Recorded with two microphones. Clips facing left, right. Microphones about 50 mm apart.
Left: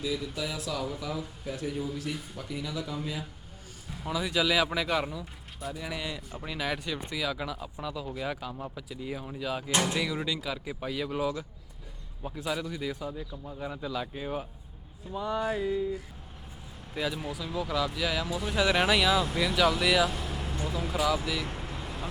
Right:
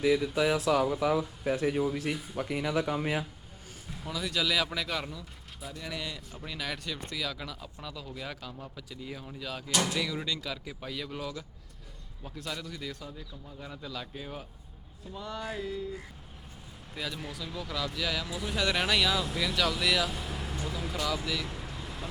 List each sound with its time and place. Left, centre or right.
0.0 s speech: right
4.0 s speech: centre
10.0 s speech: centre
16.9 s speech: centre
21.4 s vehicle: left